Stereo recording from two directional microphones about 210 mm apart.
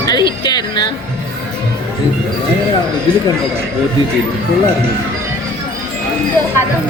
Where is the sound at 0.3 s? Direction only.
20° left (ahead or behind).